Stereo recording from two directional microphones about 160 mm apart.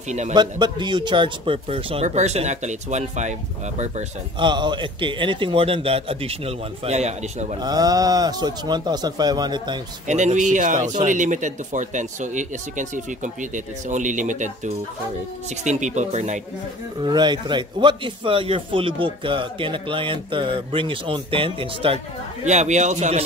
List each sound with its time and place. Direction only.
0.3 s speech: 30° right (ahead or behind)
2.0 s speech: 45° right (ahead or behind)
4.4 s a man's voice: 30° right (ahead or behind); by 7.4 s 45° right (ahead or behind)
7.6 s speech: 25° right (ahead or behind)
10.0 s speech: 50° right (ahead or behind)
17.0 s a man's voice: 25° right (ahead or behind)
22.4 s speech: 45° right (ahead or behind)